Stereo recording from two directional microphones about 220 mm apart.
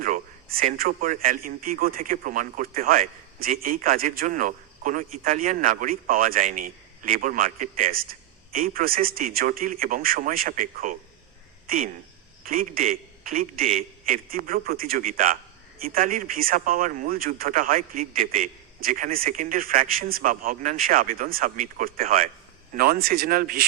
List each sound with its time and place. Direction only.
0.0 s a man's voice: 40° right (ahead or behind)